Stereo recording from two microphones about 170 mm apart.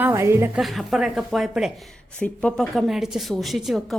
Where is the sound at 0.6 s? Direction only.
Centre (ahead or behind).